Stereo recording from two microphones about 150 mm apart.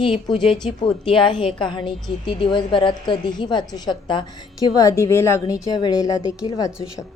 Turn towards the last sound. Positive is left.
turn(degrees=25)  # may be behind; listen again after turning